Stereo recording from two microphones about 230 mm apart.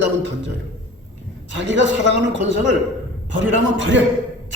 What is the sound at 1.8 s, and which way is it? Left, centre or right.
Speech, right.